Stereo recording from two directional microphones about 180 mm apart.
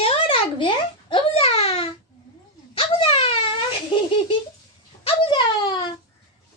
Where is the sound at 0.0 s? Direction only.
30° left (ahead or behind).